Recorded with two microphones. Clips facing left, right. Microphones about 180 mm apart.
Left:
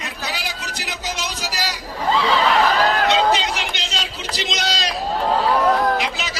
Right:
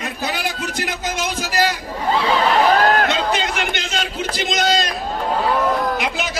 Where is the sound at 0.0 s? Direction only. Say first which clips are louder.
Right 5 dB; 50° right (ahead or behind).